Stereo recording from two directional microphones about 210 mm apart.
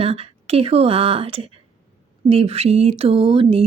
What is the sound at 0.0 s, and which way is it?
Speech, 30° right (ahead or behind).